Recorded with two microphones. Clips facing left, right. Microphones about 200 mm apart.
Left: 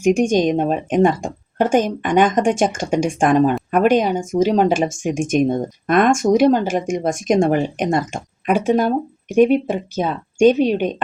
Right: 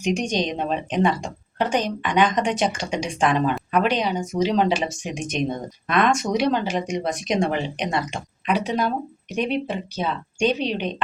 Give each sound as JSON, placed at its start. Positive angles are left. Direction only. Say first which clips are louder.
{"t": 0.0, "sound": "speech", "louder": "left 8 dB", "side_deg": 50}